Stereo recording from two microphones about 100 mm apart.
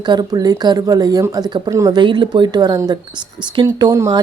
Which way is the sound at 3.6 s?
35° right (ahead or behind).